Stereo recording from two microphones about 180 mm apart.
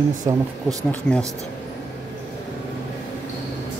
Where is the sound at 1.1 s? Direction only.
5° left (ahead or behind).